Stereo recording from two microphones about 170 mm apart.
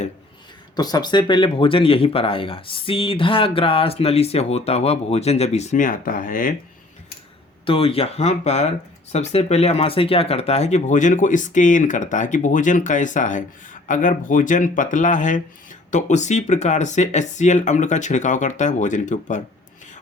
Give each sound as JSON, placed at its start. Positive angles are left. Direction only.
{"t": 0.8, "sound": "speech", "side_deg": 25}
{"t": 7.6, "sound": "speech", "side_deg": 35}